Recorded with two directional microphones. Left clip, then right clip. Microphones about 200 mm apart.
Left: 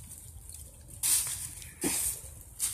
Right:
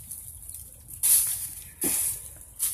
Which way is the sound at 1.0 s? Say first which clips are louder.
Right 3 dB; centre (ahead or behind).